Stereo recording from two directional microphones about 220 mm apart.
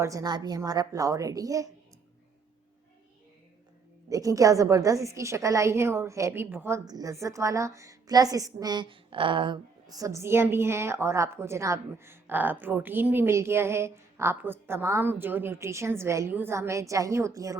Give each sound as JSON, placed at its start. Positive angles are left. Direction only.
{"t": 0.0, "sound": "a woman's voice", "side_deg": -15}
{"t": 4.1, "sound": "a woman's voice", "side_deg": -15}